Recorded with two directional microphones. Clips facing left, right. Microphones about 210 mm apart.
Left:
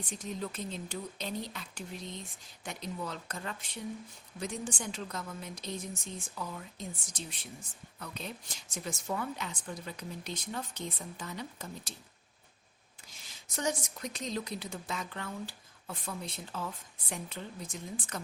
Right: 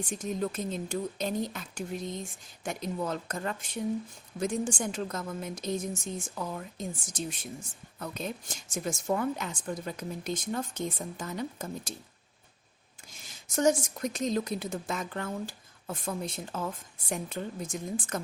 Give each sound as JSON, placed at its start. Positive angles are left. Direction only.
{"t": 0.2, "sound": "a woman's voice", "side_deg": -45}
{"t": 13.6, "sound": "a woman's voice", "side_deg": -45}